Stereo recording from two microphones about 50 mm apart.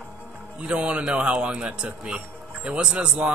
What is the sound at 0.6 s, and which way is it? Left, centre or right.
Speech, right.